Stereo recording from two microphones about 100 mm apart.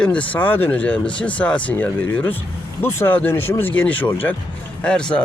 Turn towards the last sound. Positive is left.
turn(degrees=10)  # may be behind; listen again after turning